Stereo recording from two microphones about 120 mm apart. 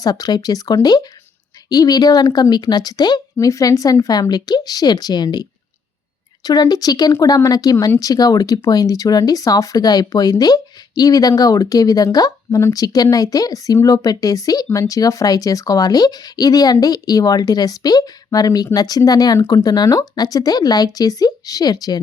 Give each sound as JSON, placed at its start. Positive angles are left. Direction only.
{"t": 0.0, "sound": "speech", "side_deg": 30}